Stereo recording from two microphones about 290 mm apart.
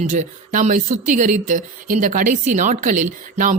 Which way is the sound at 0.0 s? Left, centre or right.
Right.